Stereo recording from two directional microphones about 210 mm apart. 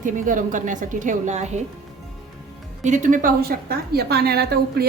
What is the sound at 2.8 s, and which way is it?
A woman's voice, 35° right (ahead or behind).